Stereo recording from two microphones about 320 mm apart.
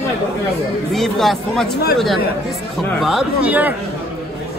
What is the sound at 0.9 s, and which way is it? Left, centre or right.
Speech, centre.